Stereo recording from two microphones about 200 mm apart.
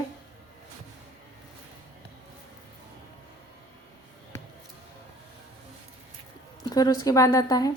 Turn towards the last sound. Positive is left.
turn(degrees=20)  # may be behind; listen again after turning